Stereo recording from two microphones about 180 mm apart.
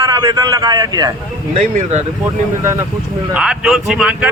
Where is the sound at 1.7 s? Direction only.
40° right (ahead or behind).